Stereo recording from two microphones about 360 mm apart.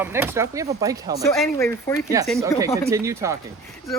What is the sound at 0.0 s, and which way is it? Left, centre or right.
Speech, centre.